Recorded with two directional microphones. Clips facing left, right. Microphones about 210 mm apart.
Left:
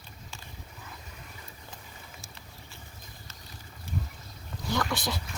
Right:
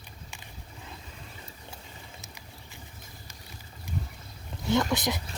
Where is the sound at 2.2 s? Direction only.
15° right (ahead or behind).